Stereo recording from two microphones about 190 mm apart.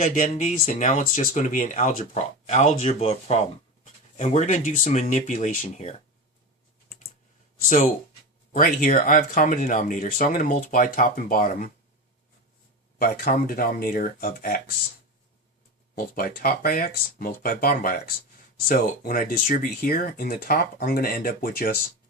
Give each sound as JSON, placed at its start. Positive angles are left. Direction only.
{"t": 0.0, "sound": "speech", "side_deg": 40}
{"t": 8.5, "sound": "speech", "side_deg": 45}
{"t": 13.0, "sound": "speech", "side_deg": 45}
{"t": 16.0, "sound": "speech", "side_deg": 50}